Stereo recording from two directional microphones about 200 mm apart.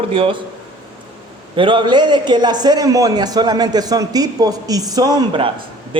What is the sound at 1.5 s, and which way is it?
A man's voice, 25° right (ahead or behind).